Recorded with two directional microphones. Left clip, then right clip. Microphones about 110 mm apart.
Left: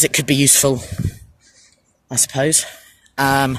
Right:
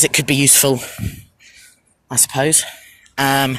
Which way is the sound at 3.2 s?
15° left (ahead or behind).